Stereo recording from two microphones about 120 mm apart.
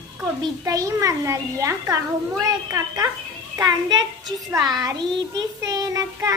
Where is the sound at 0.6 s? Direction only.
30° right (ahead or behind).